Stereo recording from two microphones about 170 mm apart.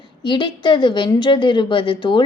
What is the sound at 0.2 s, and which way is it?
A woman's voice, 30° left (ahead or behind).